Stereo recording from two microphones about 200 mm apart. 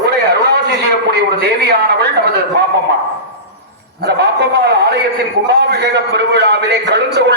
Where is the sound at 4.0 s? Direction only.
55° right (ahead or behind).